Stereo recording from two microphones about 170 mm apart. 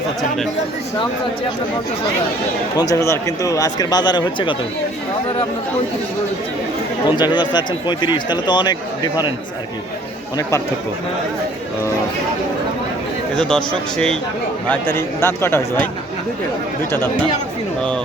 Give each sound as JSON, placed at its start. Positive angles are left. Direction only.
{"t": 2.7, "sound": "speech", "side_deg": 20}
{"t": 7.2, "sound": "speech", "side_deg": 25}
{"t": 13.3, "sound": "speech", "side_deg": 5}